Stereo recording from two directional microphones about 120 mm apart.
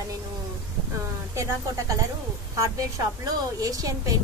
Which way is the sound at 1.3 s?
25° right (ahead or behind).